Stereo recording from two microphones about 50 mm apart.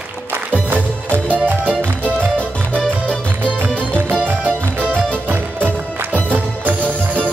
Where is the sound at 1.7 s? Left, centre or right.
Right.